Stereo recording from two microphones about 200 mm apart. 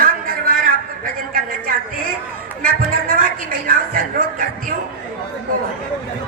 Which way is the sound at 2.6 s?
45° right (ahead or behind).